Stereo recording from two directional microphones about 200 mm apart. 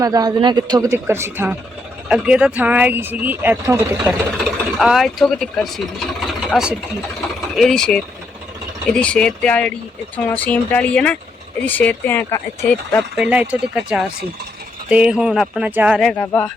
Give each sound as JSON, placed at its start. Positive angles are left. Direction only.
{"t": 0.0, "sound": "speech", "side_deg": -20}
{"t": 4.4, "sound": "speech", "side_deg": 0}
{"t": 13.1, "sound": "speech", "side_deg": -5}